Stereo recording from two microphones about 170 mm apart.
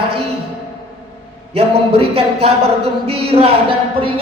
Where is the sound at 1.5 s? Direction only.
35° right (ahead or behind).